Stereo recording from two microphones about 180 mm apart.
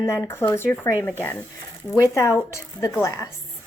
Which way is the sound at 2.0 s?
15° left (ahead or behind).